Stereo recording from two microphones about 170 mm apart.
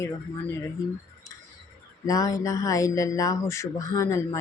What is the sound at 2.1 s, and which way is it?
Speech, 20° left (ahead or behind).